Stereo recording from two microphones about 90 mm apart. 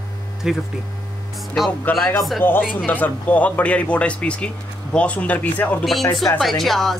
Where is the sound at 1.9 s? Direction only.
20° left (ahead or behind).